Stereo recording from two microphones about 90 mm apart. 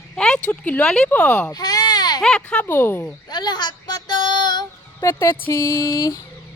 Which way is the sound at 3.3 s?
55° left (ahead or behind).